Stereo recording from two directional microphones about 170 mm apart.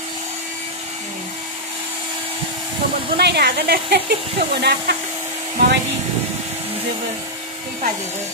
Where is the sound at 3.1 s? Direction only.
70° right (ahead or behind).